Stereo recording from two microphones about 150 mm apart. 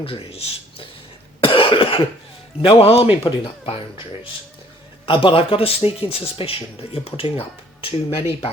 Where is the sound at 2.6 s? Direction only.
35° left (ahead or behind).